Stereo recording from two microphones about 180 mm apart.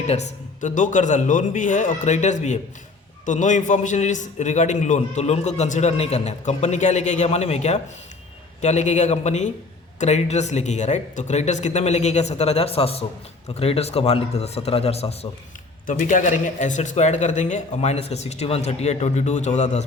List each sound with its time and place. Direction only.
0.1 s a man's voice: 40° left (ahead or behind)
15.9 s a man's voice: 45° left (ahead or behind)